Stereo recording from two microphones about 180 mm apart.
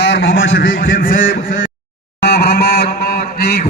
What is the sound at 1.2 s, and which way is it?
Speech, 90° left.